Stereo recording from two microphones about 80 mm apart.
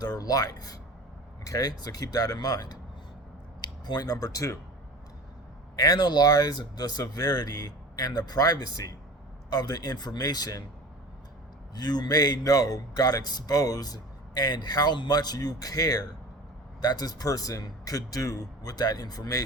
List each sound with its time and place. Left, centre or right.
0.0 s speech: left
5.8 s speech: left
11.7 s speech: left